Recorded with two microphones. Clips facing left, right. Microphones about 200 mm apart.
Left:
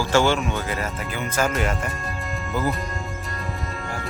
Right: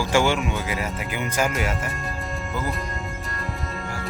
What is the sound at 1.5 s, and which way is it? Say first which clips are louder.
Speech: left 2 dB; 5° right (ahead or behind).